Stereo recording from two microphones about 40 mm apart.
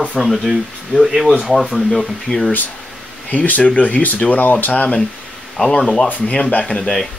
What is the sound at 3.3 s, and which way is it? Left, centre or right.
Speech, left.